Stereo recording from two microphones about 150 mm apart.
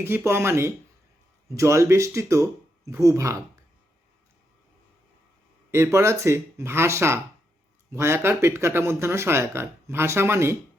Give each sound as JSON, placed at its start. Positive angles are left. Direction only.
{"t": 0.0, "sound": "speech", "side_deg": -15}
{"t": 5.7, "sound": "speech", "side_deg": -20}